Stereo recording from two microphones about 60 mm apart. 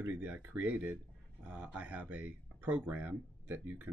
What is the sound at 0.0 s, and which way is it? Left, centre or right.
Speech, right.